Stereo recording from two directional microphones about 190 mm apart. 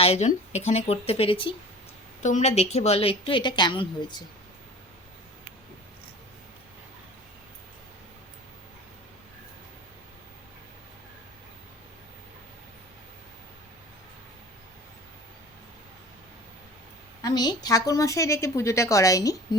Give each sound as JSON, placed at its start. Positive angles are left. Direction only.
{"t": 0.0, "sound": "a woman's voice", "side_deg": 35}
{"t": 17.2, "sound": "a woman's voice", "side_deg": 20}